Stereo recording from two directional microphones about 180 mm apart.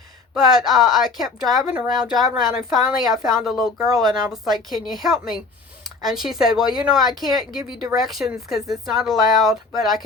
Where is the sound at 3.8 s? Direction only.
20° right (ahead or behind).